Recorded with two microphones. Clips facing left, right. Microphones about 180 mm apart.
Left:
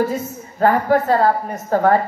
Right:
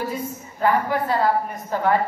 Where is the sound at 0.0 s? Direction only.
45° left (ahead or behind).